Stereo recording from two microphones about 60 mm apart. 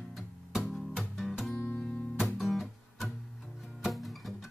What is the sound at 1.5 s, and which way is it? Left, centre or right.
Music, left.